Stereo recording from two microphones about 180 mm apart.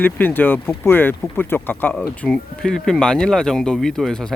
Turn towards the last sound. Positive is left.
turn(degrees=5)  # may be behind; listen again after turning